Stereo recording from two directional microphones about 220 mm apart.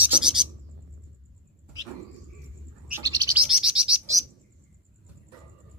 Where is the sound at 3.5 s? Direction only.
5° right (ahead or behind).